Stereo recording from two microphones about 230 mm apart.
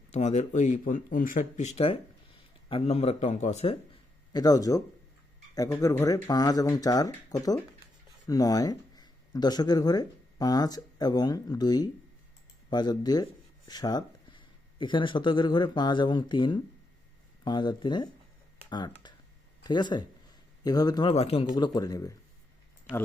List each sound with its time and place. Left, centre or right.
0.1 s speech: left
4.3 s speech: centre